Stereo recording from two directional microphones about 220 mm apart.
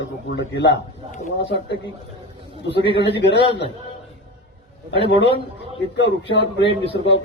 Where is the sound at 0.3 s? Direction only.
50° left (ahead or behind).